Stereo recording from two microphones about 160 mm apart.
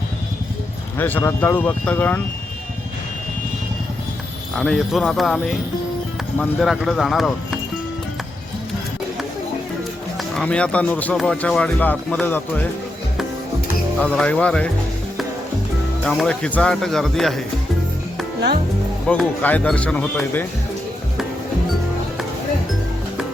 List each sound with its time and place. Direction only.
0.9 s speech: 10° left (ahead or behind)
4.5 s speech: centre (ahead or behind)
10.2 s speech: 5° left (ahead or behind)
14.0 s speech: 10° left (ahead or behind)
16.0 s speech: 5° left (ahead or behind)
19.0 s speech: 5° left (ahead or behind)